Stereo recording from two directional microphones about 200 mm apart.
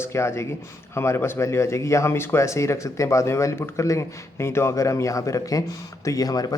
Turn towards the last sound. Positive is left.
turn(degrees=20)  # may be behind; listen again after turning